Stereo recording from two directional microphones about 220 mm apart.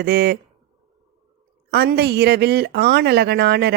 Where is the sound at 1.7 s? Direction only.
45° right (ahead or behind).